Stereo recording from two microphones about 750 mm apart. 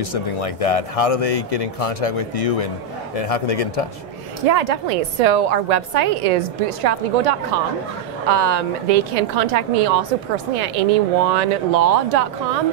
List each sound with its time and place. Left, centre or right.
0.0 s speech: left
4.5 s a woman's voice: right